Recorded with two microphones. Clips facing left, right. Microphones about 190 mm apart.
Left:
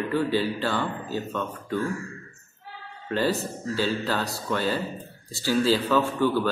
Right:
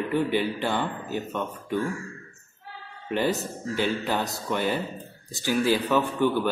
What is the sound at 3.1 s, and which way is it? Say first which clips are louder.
Speech: even; 20° right (ahead or behind).